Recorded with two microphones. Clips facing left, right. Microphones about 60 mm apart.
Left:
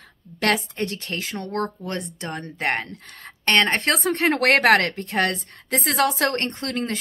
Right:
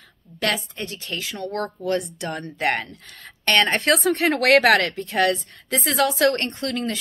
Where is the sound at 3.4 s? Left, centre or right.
Left.